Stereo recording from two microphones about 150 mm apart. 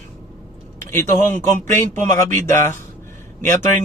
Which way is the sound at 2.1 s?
15° left (ahead or behind).